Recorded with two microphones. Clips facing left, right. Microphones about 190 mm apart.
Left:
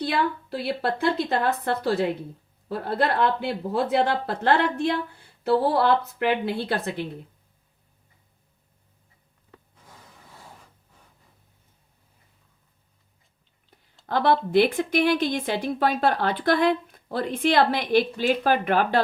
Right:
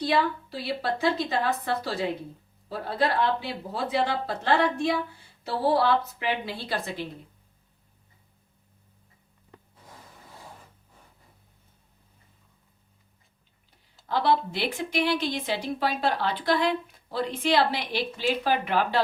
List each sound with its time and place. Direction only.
0.0 s speech: 55° left (ahead or behind)
14.1 s speech: 50° left (ahead or behind)